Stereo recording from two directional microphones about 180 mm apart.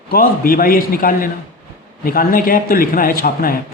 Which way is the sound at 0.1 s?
55° left (ahead or behind).